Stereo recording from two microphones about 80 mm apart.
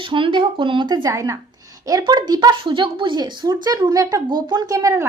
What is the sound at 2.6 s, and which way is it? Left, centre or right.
Speech, right.